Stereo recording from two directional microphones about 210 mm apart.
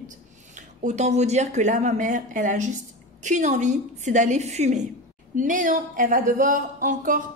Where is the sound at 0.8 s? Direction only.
35° right (ahead or behind).